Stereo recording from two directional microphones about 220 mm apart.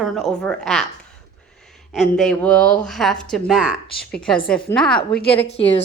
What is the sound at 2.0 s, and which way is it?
A woman's voice, 5° left (ahead or behind).